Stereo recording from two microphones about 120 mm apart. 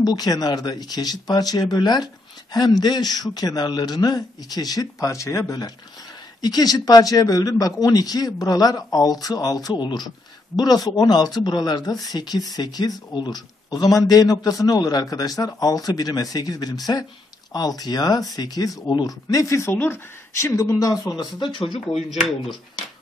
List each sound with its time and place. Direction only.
0.0 s a man's voice: 30° left (ahead or behind)